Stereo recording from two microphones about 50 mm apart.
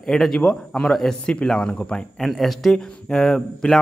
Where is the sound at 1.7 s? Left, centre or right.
Left.